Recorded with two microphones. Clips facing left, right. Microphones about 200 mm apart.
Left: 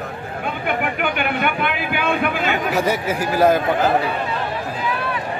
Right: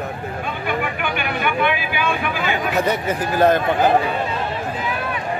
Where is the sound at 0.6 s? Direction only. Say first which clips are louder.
Left 2 dB; 60° left (ahead or behind).